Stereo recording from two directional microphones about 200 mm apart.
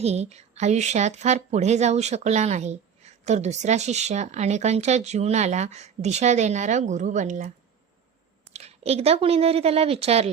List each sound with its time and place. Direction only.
0.0 s speech: 30° right (ahead or behind)
8.5 s a woman's voice: 30° right (ahead or behind)